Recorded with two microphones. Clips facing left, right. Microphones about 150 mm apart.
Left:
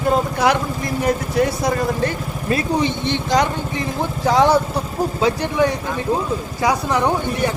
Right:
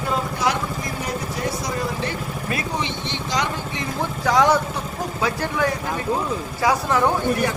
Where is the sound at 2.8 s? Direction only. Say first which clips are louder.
Left 7 dB; 50° left (ahead or behind).